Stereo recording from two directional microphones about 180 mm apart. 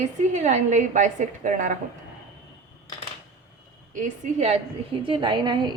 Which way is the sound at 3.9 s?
40° right (ahead or behind).